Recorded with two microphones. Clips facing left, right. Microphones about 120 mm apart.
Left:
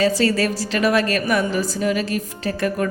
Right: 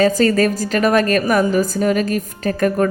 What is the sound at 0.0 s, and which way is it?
A woman's voice, 45° right (ahead or behind).